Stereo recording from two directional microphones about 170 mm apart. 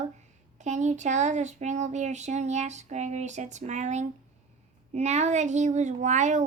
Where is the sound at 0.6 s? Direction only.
45° right (ahead or behind).